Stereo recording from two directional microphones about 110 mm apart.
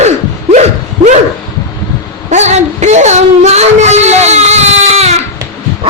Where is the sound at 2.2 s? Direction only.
90° right.